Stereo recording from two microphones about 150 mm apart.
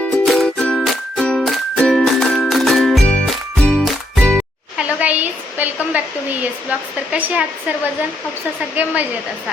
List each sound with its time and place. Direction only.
0.0 s music: 5° left (ahead or behind)
4.8 s speech: 10° right (ahead or behind)
8.7 s speech: 10° right (ahead or behind)